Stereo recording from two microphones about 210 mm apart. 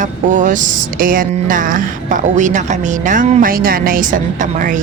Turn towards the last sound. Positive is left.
turn(degrees=-35)  # may be behind; listen again after turning